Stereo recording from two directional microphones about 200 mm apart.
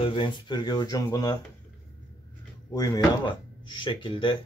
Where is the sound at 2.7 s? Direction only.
15° left (ahead or behind).